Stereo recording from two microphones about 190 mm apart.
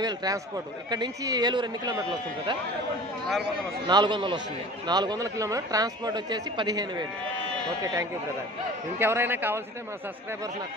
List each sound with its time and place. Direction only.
0.0 s a man's voice: 20° right (ahead or behind)
3.8 s a man's voice: 25° right (ahead or behind)